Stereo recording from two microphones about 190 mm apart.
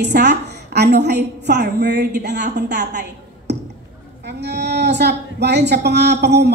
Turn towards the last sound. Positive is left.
turn(degrees=-60)  # may be behind; listen again after turning